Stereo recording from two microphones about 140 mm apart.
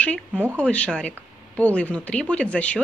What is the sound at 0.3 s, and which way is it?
Speech, 10° right (ahead or behind).